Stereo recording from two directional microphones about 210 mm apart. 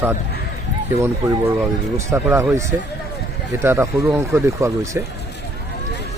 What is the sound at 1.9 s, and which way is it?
Speech, 15° right (ahead or behind).